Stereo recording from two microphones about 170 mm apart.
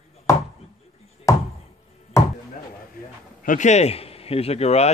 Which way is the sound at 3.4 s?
45° left (ahead or behind).